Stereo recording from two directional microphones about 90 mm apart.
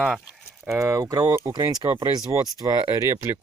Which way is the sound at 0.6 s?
30° right (ahead or behind).